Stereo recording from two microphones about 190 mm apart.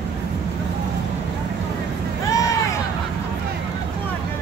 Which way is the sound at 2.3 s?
15° left (ahead or behind).